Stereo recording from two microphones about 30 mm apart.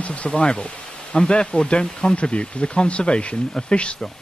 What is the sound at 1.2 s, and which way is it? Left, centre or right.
Speech, left.